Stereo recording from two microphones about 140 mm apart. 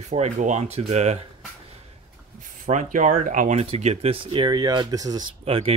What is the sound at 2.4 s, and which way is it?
Speech, 65° right (ahead or behind).